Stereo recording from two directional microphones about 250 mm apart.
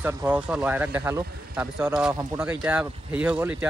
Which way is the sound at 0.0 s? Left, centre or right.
Centre.